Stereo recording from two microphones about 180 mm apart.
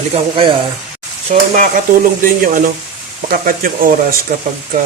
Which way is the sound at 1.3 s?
45° right (ahead or behind).